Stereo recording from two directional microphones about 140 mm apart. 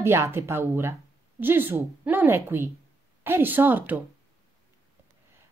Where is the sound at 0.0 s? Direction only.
15° right (ahead or behind).